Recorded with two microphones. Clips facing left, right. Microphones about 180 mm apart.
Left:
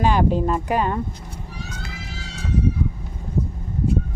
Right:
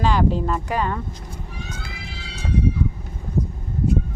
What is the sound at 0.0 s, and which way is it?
Speech, 15° left (ahead or behind).